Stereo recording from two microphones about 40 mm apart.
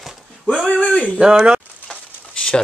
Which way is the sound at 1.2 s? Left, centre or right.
Right.